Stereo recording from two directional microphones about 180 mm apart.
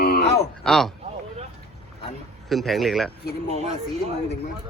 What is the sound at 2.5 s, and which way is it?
Speech, centre (ahead or behind).